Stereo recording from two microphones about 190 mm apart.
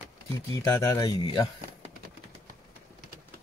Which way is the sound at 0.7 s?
15° left (ahead or behind).